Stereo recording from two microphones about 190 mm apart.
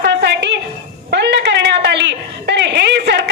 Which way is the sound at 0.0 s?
65° right (ahead or behind).